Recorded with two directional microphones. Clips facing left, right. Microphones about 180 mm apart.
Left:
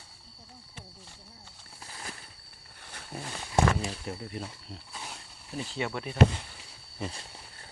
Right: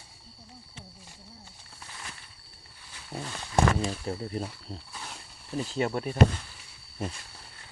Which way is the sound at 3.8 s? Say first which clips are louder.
Right 4 dB; 35° right (ahead or behind).